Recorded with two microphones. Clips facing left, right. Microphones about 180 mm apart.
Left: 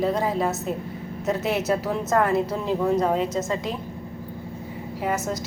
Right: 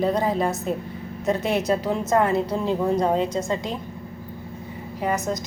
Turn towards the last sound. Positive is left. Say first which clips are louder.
# right 1 dB
turn(degrees=5)  # may be behind; listen again after turning